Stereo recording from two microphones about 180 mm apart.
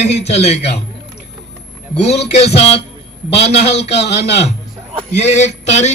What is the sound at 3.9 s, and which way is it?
Speech, 70° left (ahead or behind).